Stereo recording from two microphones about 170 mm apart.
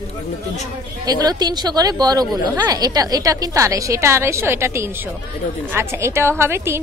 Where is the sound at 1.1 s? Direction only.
25° right (ahead or behind).